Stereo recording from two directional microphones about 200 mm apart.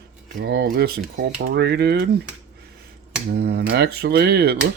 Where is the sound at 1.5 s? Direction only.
55° right (ahead or behind).